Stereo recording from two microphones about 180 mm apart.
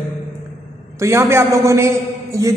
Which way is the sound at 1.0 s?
15° right (ahead or behind).